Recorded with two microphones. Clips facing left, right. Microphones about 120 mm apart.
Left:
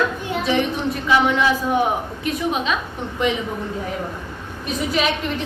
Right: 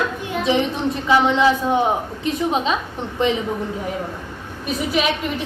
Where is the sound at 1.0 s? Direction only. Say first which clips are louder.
Right 2 dB; 25° right (ahead or behind).